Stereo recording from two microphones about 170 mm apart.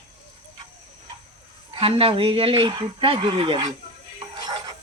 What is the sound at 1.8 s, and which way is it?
Speech, 35° right (ahead or behind).